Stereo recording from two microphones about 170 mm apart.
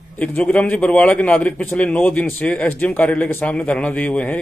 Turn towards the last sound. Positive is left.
turn(degrees=10)  # may be behind; listen again after turning